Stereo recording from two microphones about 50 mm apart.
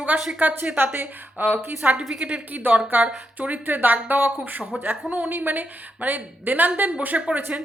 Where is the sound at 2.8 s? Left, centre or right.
Right.